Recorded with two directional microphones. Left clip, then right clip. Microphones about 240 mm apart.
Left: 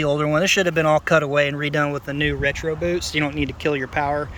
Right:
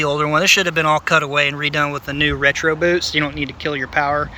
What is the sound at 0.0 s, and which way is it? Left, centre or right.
Speech, centre.